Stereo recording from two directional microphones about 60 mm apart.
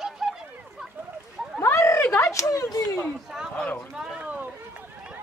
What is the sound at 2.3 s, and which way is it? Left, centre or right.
Speech, left.